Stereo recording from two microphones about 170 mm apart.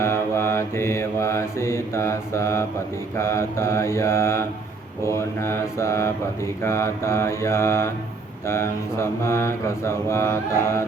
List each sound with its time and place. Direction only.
0.0 s mantra: 15° left (ahead or behind)